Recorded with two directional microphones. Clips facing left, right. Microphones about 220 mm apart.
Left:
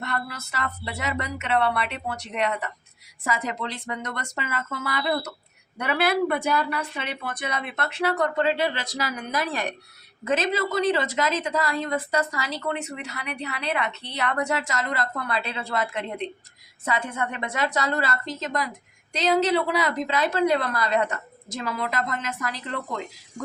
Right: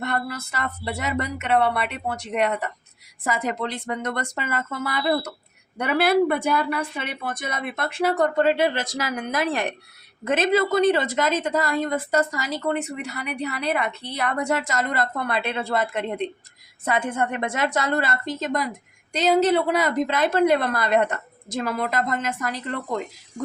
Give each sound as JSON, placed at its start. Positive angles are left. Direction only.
{"t": 0.0, "sound": "a woman's voice", "side_deg": -50}